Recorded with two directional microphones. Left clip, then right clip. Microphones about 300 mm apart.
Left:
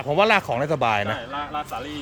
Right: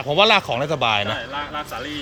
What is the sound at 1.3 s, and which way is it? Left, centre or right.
Speech, left.